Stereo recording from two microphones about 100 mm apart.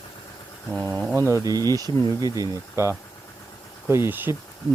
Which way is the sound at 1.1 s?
30° right (ahead or behind).